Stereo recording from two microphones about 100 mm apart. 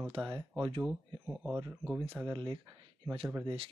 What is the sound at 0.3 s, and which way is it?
Speech, 50° right (ahead or behind).